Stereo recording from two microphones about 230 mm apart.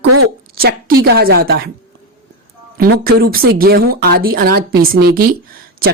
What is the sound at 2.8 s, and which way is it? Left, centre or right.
A woman's voice, right.